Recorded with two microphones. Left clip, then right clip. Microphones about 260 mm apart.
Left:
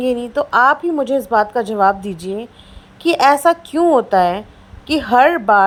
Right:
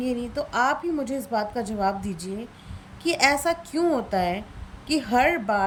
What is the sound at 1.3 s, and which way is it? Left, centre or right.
Speech, left.